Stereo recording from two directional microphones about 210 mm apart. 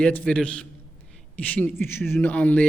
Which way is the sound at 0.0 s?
5° left (ahead or behind).